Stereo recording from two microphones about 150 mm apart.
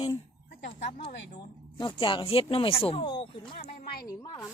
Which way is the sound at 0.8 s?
50° left (ahead or behind).